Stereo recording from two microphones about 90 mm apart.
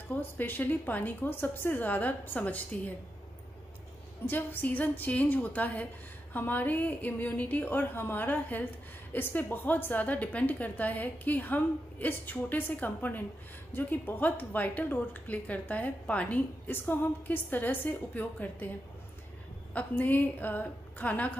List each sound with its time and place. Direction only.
0.1 s a woman's voice: 20° left (ahead or behind)
4.3 s a woman's voice: 20° left (ahead or behind)
19.7 s a woman's voice: 20° left (ahead or behind)